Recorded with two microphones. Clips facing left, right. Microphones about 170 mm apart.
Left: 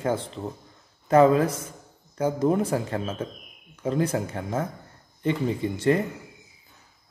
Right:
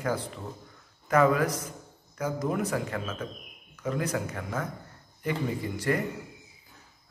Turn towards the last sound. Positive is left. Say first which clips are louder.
# left 6 dB
turn(degrees=25)  # may be behind; listen again after turning